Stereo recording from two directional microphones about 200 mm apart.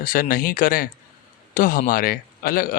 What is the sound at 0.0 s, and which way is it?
Speech, 45° left (ahead or behind).